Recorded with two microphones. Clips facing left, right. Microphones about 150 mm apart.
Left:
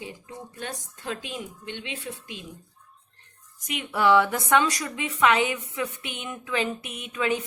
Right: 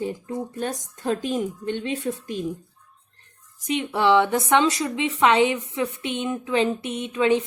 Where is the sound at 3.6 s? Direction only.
25° right (ahead or behind).